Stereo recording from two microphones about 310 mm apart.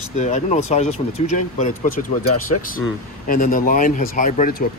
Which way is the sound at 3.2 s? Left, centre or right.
Left.